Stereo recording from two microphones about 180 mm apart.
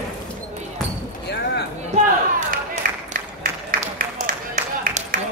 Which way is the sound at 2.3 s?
45° right (ahead or behind).